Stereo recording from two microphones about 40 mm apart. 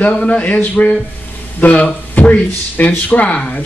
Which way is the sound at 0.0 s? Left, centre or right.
Left.